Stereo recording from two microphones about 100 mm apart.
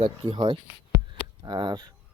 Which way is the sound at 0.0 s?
80° right.